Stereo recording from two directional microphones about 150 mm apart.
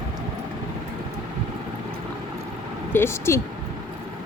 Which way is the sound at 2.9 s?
15° left (ahead or behind).